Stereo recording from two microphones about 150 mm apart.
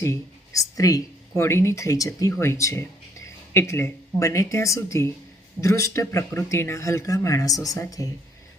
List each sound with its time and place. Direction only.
0.0 s speech: 20° left (ahead or behind)